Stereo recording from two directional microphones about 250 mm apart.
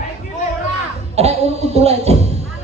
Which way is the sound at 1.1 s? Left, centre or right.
Right.